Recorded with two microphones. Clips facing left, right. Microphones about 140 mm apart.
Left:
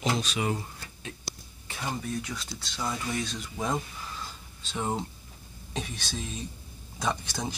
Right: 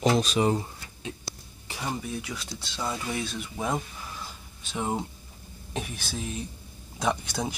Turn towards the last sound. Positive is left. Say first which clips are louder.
# right 3 dB
turn(degrees=-10)  # may be behind; listen again after turning